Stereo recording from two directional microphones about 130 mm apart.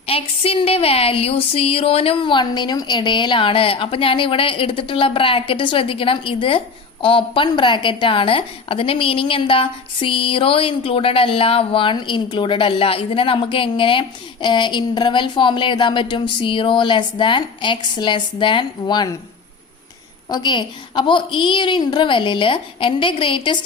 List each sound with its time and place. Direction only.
0.1 s a woman's voice: 45° left (ahead or behind)
20.3 s speech: 35° left (ahead or behind)